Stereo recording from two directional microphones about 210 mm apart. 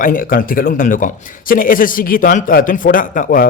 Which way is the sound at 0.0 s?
40° left (ahead or behind).